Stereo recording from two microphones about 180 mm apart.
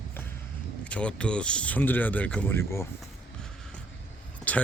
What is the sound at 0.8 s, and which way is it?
Speech, 5° left (ahead or behind).